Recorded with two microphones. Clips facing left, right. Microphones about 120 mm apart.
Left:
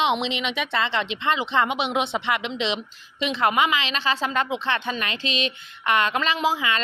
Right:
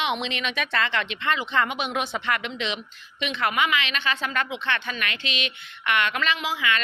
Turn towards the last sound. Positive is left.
turn(degrees=35)  # may be behind; listen again after turning